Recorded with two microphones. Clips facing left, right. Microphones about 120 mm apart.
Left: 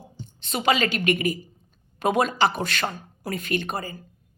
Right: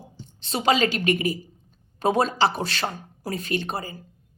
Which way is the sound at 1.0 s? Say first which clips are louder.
Even; 35° right (ahead or behind).